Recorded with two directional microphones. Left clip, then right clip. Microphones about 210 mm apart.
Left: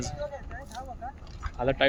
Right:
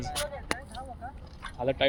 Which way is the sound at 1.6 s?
10° left (ahead or behind).